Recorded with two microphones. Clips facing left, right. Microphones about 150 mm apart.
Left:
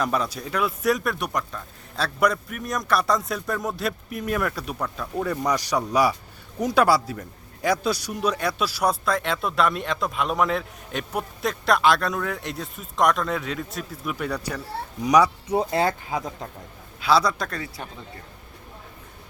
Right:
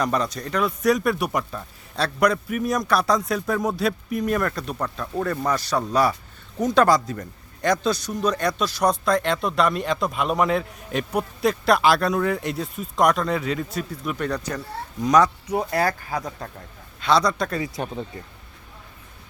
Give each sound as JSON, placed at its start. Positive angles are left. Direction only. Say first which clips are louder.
{"t": 0.0, "sound": "speech", "louder": "right 1 dB", "side_deg": 5}
{"t": 15.4, "sound": "speech", "louder": "left 1 dB", "side_deg": 25}
{"t": 17.0, "sound": "speech", "louder": "right 1 dB", "side_deg": 5}